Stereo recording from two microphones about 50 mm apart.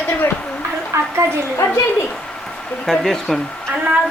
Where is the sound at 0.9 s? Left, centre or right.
Right.